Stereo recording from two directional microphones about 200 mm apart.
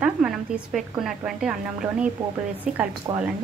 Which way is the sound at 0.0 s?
5° right (ahead or behind).